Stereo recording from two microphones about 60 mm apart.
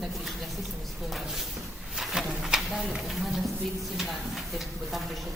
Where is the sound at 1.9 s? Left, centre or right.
Centre.